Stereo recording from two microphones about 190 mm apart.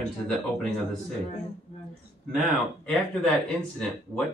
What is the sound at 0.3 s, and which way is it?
Speech, centre (ahead or behind).